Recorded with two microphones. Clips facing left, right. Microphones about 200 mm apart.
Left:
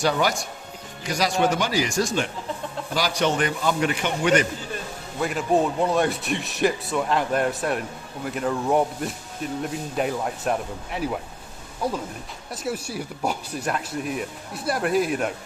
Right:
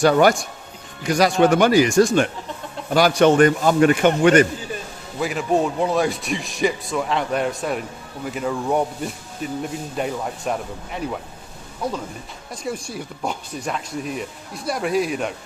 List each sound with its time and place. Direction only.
0.0 s a man's voice: 55° right (ahead or behind)
5.2 s speech: centre (ahead or behind)
12.5 s speech: 5° left (ahead or behind)